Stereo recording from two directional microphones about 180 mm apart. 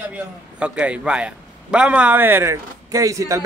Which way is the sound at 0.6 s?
5° right (ahead or behind).